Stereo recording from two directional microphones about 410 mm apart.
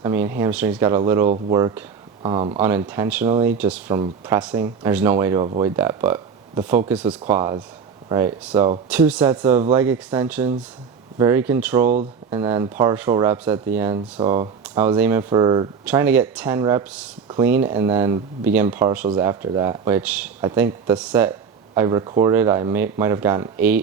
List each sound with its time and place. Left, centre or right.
0.0 s speech: centre
11.9 s speech: centre
12.4 s speech: centre